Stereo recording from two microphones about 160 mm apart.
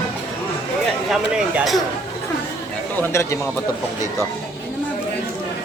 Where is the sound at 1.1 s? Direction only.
Centre (ahead or behind).